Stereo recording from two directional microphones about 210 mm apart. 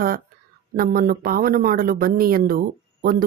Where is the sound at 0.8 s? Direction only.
45° right (ahead or behind).